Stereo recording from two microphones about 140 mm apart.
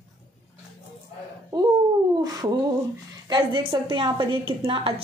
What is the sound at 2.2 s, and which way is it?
Speech, 30° right (ahead or behind).